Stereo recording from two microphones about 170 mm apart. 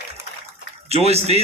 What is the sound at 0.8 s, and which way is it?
Speech, 35° right (ahead or behind).